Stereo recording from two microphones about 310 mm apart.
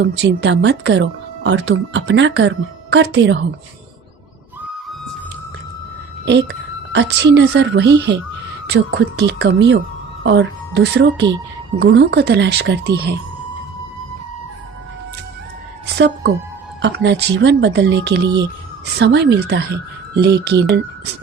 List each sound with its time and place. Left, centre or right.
0.1 s a woman's voice: right
6.2 s a woman's voice: right
16.0 s a woman's voice: right